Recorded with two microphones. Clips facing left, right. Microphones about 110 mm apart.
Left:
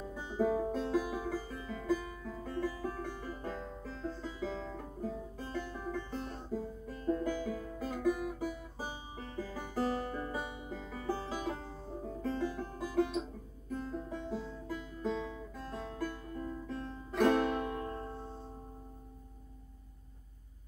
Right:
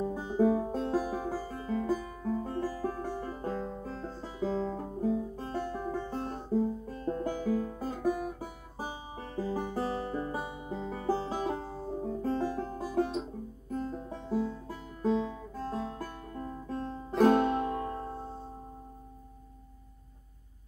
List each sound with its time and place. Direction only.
0.0 s music: 35° right (ahead or behind)
9.8 s music: 25° right (ahead or behind)
10.3 s music: 40° right (ahead or behind)